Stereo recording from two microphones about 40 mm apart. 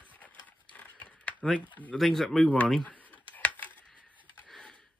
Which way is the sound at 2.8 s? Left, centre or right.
Left.